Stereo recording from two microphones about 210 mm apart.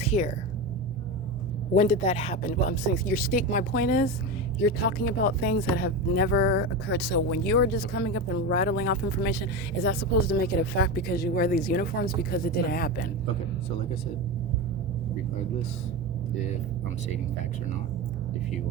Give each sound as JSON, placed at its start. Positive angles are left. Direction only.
{"t": 0.0, "sound": "a sound", "side_deg": 30}
{"t": 1.7, "sound": "speech", "side_deg": 30}
{"t": 3.0, "sound": "speech", "side_deg": 45}